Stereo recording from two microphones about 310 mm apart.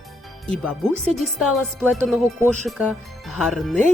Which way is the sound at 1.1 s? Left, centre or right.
Centre.